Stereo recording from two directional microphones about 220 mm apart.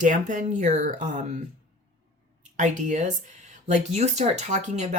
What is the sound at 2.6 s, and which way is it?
Speech, 35° right (ahead or behind).